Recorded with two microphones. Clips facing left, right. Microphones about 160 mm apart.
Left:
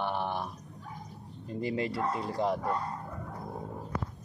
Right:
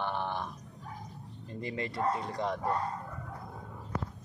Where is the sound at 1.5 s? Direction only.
30° left (ahead or behind).